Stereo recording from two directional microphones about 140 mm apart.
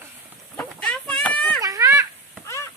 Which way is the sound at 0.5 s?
10° left (ahead or behind).